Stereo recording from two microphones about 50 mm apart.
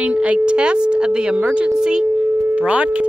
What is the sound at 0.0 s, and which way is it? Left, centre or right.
Speech, right.